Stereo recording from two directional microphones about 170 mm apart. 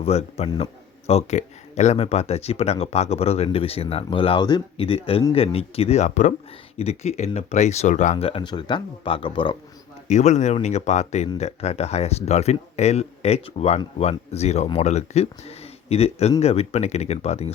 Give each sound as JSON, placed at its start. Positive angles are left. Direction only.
{"t": 0.0, "sound": "speech", "side_deg": 40}
{"t": 10.1, "sound": "speech", "side_deg": 45}